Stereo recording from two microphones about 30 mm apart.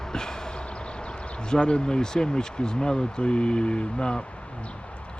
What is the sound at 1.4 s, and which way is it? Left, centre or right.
Speech, left.